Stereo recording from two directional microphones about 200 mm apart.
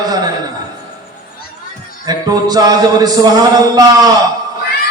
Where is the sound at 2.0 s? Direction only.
20° right (ahead or behind).